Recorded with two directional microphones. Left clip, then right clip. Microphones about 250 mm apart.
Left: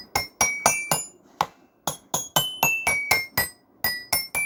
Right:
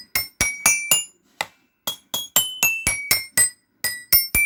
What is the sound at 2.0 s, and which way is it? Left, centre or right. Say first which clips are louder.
Music: right 1 dB; right.